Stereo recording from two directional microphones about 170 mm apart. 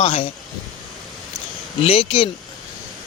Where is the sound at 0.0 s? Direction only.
35° left (ahead or behind).